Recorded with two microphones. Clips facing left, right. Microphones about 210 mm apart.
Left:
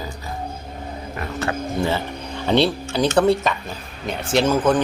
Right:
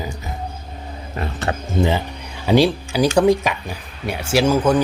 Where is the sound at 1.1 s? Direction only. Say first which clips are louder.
Right 1 dB; 25° right (ahead or behind).